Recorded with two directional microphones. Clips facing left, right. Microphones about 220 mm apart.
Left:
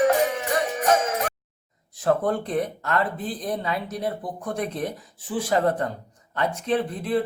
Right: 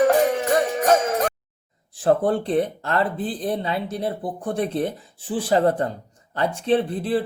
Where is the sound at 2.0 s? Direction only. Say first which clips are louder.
Right 3 dB; 30° right (ahead or behind).